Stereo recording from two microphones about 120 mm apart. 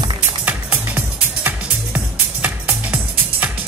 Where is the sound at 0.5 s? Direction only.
15° right (ahead or behind).